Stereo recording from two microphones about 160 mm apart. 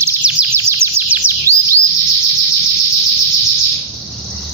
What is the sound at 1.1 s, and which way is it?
Chirp, 15° right (ahead or behind).